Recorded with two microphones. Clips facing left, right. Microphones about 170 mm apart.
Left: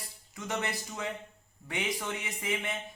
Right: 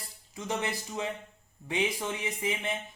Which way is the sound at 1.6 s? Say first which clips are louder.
Right 4 dB; 20° right (ahead or behind).